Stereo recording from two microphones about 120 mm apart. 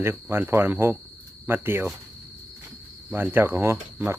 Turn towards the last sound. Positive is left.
turn(degrees=-20)  # may be behind; listen again after turning